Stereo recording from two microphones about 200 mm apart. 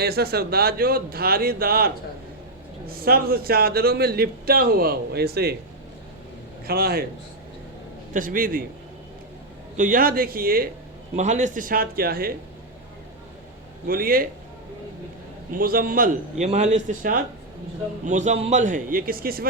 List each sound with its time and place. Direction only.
0.0 s a man's voice: 50° right (ahead or behind)
6.7 s a man's voice: 50° right (ahead or behind)
8.1 s a man's voice: 40° right (ahead or behind)
9.7 s a man's voice: 40° right (ahead or behind)
11.2 s a man's voice: 35° right (ahead or behind)
13.8 s a man's voice: 45° right (ahead or behind)
15.5 s a man's voice: 45° right (ahead or behind)